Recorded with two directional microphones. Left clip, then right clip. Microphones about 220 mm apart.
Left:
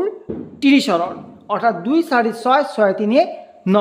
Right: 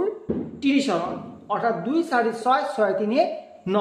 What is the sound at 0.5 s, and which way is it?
A woman's voice, 55° left (ahead or behind).